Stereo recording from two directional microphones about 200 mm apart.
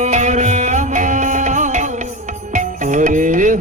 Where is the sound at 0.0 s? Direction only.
35° right (ahead or behind).